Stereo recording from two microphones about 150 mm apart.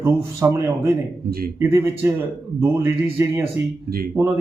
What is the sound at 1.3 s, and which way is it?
Speech, 85° right.